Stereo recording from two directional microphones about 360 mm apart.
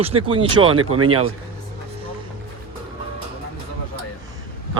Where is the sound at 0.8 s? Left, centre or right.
Right.